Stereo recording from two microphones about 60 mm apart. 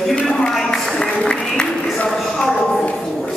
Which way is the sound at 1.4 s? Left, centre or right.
Centre.